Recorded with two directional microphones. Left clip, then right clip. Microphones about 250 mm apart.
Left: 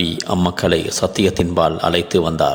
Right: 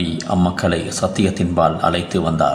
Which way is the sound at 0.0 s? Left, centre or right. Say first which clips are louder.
Left 1 dB; left.